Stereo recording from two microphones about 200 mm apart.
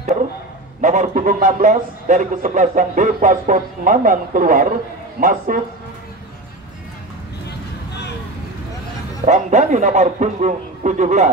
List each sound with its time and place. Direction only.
0.7 s a man's voice: 40° right (ahead or behind)
9.2 s a man's voice: 35° right (ahead or behind)